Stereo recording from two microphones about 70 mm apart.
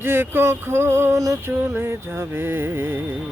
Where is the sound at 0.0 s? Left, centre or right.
Right.